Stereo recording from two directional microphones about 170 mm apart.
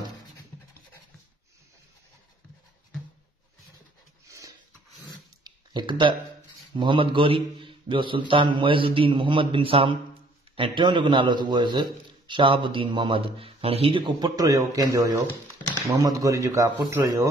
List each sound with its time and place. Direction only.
4.3 s rub: 20° right (ahead or behind)
5.4 s a sound: 25° right (ahead or behind)
6.7 s a man's voice: 30° right (ahead or behind)